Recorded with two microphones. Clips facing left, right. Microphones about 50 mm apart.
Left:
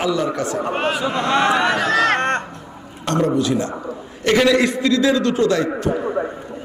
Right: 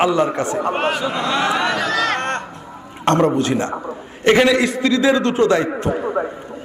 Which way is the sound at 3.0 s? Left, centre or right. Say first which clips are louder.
Right 3 dB; right.